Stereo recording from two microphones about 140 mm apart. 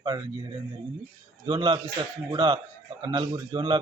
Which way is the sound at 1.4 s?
30° right (ahead or behind).